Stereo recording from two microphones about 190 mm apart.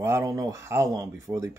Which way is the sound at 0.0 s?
15° right (ahead or behind).